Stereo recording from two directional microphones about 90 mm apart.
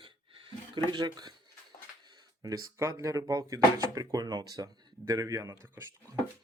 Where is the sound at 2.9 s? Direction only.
40° right (ahead or behind).